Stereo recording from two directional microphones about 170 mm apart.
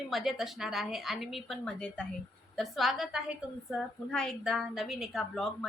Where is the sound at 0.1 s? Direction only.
Centre (ahead or behind).